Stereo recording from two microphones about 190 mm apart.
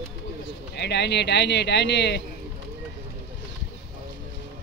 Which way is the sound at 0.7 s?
60° left (ahead or behind).